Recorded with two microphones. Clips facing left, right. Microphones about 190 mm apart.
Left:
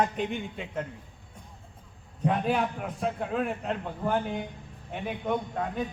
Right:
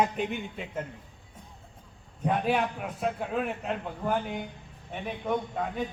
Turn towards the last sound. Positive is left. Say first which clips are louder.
# even
turn(degrees=0)  # may be behind; listen again after turning